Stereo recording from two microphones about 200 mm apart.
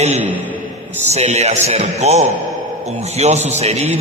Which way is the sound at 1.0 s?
35° right (ahead or behind).